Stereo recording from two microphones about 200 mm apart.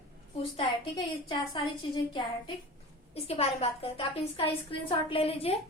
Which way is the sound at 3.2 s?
30° left (ahead or behind).